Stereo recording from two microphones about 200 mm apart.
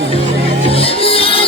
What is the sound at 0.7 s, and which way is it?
Music, 30° left (ahead or behind).